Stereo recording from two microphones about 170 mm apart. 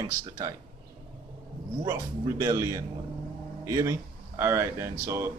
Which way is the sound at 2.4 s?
15° right (ahead or behind).